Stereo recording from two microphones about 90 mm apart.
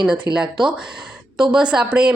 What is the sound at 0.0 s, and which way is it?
Speech, 5° right (ahead or behind).